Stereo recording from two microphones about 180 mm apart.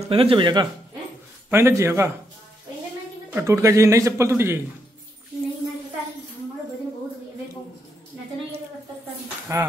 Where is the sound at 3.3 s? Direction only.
15° right (ahead or behind).